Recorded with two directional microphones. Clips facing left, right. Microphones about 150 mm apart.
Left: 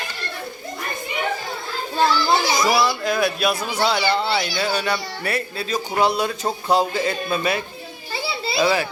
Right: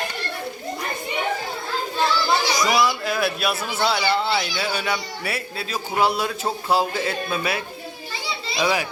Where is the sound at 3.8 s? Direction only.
5° right (ahead or behind).